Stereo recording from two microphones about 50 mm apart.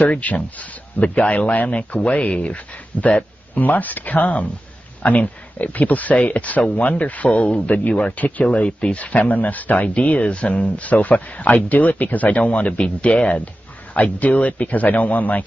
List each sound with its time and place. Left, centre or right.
0.0 s speech: left